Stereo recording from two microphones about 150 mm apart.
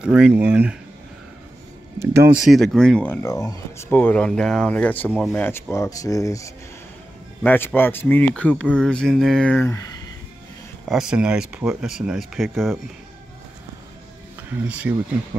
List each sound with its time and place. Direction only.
0.0 s speech: 5° right (ahead or behind)
2.0 s speech: 15° right (ahead or behind)
2.4 s speech: centre (ahead or behind); by 10.1 s 25° left (ahead or behind)
10.9 s speech: 5° right (ahead or behind)
14.5 s speech: 10° right (ahead or behind)